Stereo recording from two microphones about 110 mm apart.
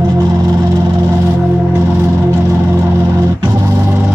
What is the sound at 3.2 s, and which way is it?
Organ, 25° right (ahead or behind).